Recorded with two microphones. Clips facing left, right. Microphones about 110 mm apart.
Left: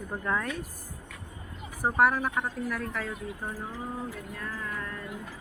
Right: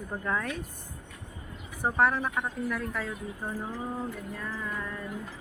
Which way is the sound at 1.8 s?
5° left (ahead or behind).